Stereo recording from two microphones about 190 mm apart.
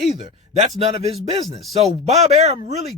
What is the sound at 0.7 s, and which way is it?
A man's voice, 30° right (ahead or behind).